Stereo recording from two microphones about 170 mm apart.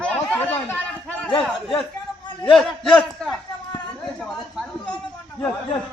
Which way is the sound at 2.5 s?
5° left (ahead or behind).